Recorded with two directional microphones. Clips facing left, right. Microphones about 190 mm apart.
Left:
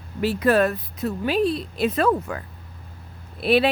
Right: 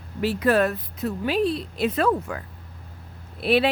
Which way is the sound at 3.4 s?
40° left (ahead or behind).